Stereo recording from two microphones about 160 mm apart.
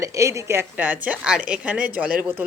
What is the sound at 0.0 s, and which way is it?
A woman's voice, 20° right (ahead or behind).